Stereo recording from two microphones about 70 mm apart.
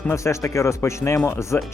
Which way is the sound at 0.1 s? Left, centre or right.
Left.